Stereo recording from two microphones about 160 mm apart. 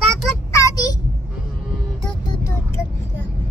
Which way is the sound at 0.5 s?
20° left (ahead or behind).